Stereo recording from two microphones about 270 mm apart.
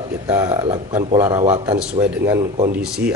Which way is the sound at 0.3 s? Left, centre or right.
Centre.